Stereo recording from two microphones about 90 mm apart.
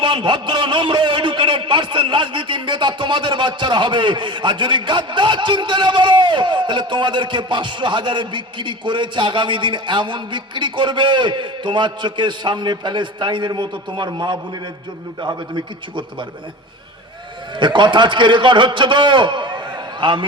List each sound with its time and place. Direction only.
0.0 s a man's voice: 60° right (ahead or behind)
17.6 s a man's voice: 60° right (ahead or behind)